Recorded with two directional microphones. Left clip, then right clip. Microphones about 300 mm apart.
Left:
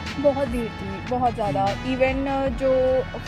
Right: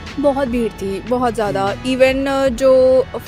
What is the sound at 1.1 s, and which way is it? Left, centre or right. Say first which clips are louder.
Speech: right 5 dB; right.